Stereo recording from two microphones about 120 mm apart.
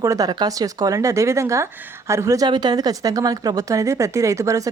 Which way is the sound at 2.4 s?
40° right (ahead or behind).